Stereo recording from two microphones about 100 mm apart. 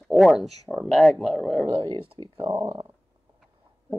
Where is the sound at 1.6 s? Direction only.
55° right (ahead or behind).